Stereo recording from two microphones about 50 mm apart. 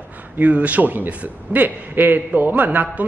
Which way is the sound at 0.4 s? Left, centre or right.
Right.